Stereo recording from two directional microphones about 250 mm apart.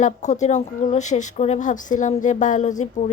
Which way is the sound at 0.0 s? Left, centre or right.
Left.